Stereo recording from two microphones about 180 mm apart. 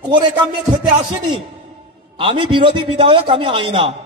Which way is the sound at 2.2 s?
25° right (ahead or behind).